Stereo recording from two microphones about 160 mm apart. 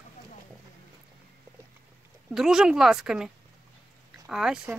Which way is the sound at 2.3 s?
5° right (ahead or behind).